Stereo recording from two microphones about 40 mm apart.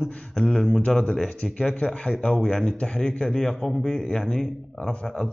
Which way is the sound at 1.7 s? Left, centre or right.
Left.